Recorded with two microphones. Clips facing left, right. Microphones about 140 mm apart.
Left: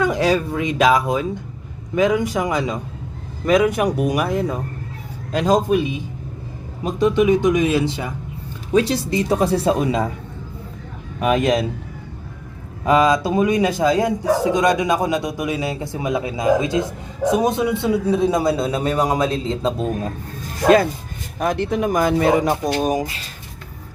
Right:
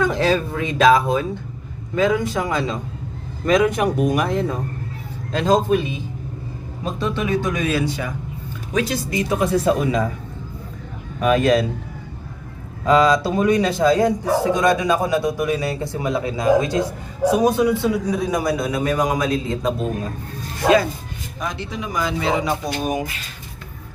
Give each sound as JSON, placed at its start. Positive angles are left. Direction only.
{"t": 0.0, "sound": "a man's voice", "side_deg": 10}
{"t": 11.2, "sound": "a man's voice", "side_deg": 20}
{"t": 12.8, "sound": "a man's voice", "side_deg": 20}
{"t": 21.3, "sound": "speech", "side_deg": 55}